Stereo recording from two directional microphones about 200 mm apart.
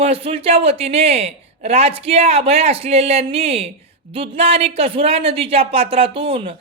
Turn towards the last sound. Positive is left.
turn(degrees=-30)  # may be behind; listen again after turning